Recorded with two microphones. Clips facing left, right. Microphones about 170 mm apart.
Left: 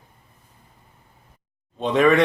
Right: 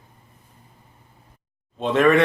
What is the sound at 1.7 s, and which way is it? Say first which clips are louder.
Speech: even; centre (ahead or behind).